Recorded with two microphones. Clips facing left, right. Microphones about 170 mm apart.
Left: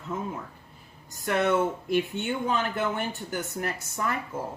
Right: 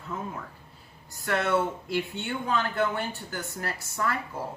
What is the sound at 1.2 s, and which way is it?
Speech, 20° left (ahead or behind).